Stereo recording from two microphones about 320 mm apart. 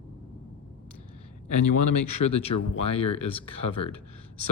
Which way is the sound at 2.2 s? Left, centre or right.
Left.